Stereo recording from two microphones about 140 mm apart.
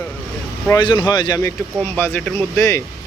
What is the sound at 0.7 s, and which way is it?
Speech, 35° left (ahead or behind).